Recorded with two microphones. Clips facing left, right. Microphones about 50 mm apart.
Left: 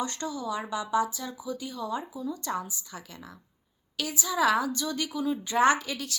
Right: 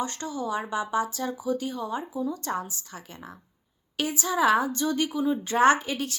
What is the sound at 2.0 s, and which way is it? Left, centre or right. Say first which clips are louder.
Speech: right 4 dB; centre.